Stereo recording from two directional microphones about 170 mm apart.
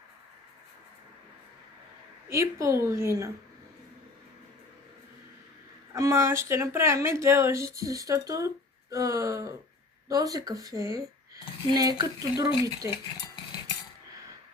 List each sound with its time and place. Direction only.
2.3 s speech: 15° right (ahead or behind)
5.9 s speech: 15° right (ahead or behind)